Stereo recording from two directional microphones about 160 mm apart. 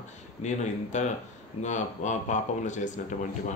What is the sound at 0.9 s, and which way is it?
Speech, 45° left (ahead or behind).